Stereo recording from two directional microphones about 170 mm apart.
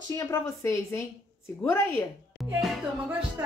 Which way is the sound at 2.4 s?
Centre (ahead or behind).